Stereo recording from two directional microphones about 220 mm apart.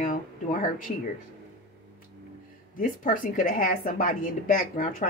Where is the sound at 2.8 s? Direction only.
35° left (ahead or behind).